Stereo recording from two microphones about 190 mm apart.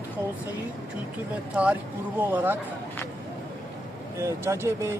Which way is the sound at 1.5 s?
5° right (ahead or behind).